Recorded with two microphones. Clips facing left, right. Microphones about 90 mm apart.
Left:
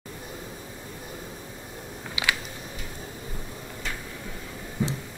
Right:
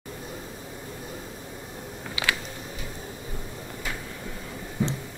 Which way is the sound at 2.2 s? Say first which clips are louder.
Even; 20° left (ahead or behind).